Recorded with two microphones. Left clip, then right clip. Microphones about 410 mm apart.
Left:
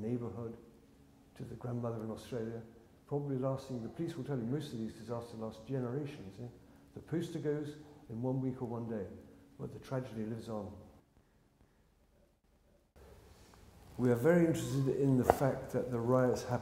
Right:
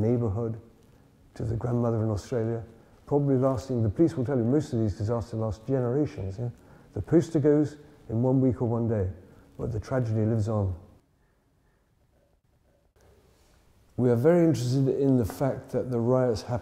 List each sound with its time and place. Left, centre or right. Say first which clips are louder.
0.0 s a sound: right 13 dB; right
1.3 s speech: right 13 dB; right
14.0 s speech: right 8 dB; right